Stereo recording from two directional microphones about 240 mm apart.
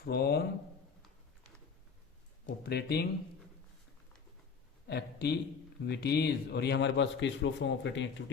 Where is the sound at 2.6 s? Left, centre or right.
Left.